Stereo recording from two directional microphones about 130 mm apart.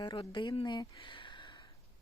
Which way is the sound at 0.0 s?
35° left (ahead or behind).